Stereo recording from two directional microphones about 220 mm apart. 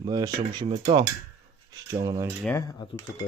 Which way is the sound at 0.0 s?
20° right (ahead or behind).